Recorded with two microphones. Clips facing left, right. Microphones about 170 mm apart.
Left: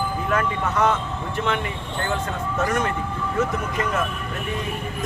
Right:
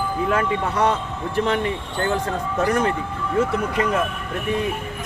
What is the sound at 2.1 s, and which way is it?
Speech, 35° right (ahead or behind).